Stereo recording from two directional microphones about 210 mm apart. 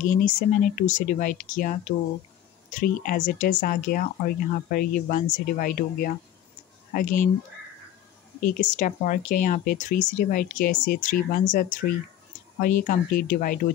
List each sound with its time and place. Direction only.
0.0 s speech: 40° left (ahead or behind)
8.5 s speech: 40° left (ahead or behind)